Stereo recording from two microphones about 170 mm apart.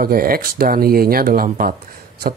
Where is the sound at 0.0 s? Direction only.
60° right (ahead or behind).